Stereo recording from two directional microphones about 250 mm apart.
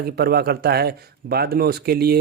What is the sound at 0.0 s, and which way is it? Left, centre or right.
Speech, right.